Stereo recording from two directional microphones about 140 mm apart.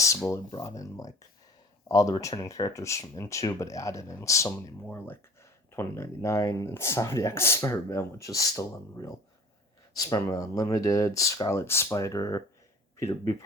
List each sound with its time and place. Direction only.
0.0 s speech: 20° left (ahead or behind)